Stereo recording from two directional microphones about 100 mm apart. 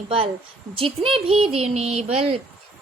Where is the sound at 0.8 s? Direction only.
65° right (ahead or behind); by 2.2 s 90° right.